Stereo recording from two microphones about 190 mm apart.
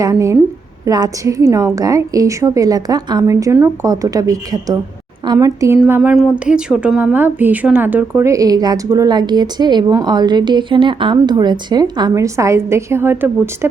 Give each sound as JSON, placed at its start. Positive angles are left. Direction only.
{"t": 0.0, "sound": "a woman's voice", "side_deg": -15}